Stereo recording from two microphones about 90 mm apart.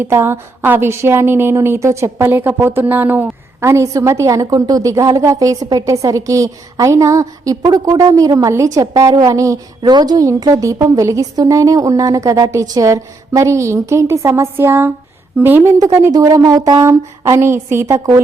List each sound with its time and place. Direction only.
0.0 s a woman's voice: 25° right (ahead or behind)
3.7 s a woman's voice: 35° right (ahead or behind)
9.9 s a woman's voice: 50° right (ahead or behind); by 15.6 s 20° right (ahead or behind)
16.1 s speech: 45° right (ahead or behind)
17.3 s a woman's voice: 30° right (ahead or behind)